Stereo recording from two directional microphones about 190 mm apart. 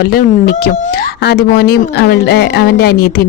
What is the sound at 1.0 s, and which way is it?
A woman's voice, 60° left (ahead or behind).